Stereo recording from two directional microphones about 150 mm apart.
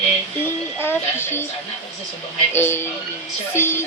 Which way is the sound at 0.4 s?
15° left (ahead or behind).